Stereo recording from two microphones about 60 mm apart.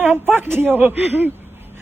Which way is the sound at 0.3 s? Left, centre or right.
Right.